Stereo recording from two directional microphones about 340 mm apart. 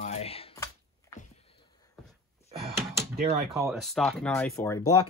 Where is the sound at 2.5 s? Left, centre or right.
Centre.